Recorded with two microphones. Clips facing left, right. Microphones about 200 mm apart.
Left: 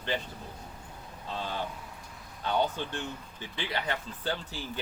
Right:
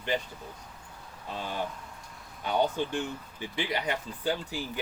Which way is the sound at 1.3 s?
15° right (ahead or behind).